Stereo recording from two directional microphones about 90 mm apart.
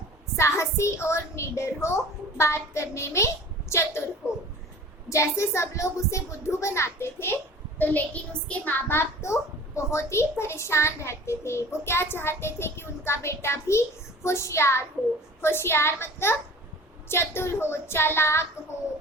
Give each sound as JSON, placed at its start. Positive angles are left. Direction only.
{"t": 0.3, "sound": "a child's voice", "side_deg": 30}
{"t": 5.0, "sound": "a child's voice", "side_deg": 30}
{"t": 7.8, "sound": "a child's voice", "side_deg": 15}